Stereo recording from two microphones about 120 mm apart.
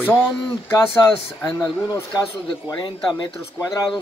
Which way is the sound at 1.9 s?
20° left (ahead or behind).